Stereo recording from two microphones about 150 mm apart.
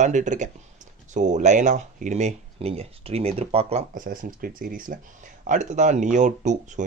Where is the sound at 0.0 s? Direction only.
55° right (ahead or behind).